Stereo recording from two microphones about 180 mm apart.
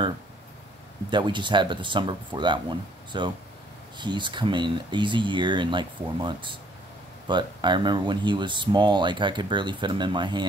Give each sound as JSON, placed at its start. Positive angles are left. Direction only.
{"t": 1.1, "sound": "speech", "side_deg": -25}